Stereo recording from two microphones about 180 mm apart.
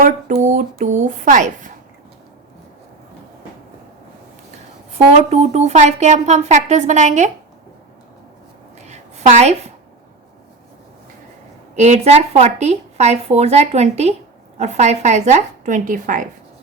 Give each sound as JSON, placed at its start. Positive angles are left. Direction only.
{"t": 0.0, "sound": "a woman's voice", "side_deg": -45}
{"t": 5.1, "sound": "a woman's voice", "side_deg": -35}
{"t": 8.8, "sound": "a sound", "side_deg": -40}
{"t": 11.8, "sound": "a woman's voice", "side_deg": -35}